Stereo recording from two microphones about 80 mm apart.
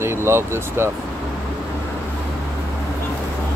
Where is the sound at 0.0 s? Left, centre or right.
Right.